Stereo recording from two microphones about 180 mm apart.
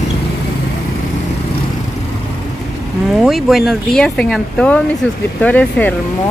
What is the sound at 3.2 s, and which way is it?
Speech, centre (ahead or behind).